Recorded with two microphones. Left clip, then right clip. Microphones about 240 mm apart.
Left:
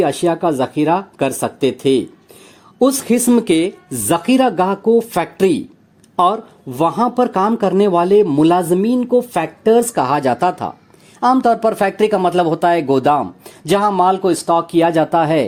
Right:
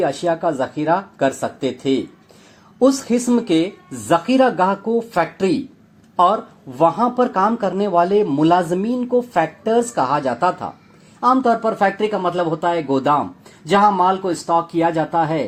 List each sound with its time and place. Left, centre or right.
0.0 s speech: left
6.7 s speech: left